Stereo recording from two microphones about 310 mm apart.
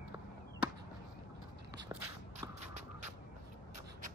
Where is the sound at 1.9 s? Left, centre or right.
Centre.